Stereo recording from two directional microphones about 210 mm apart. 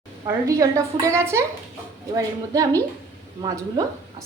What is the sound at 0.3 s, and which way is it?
Speech, 15° right (ahead or behind).